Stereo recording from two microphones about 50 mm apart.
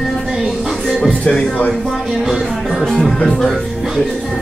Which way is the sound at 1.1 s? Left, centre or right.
Left.